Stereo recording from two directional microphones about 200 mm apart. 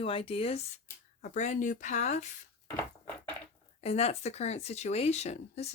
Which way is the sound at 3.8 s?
30° left (ahead or behind).